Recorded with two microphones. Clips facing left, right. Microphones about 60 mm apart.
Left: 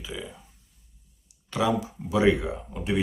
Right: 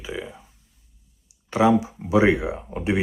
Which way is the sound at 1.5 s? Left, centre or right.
Right.